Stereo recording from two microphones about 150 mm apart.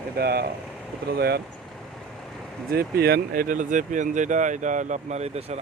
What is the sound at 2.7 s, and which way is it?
Speech, 90° right.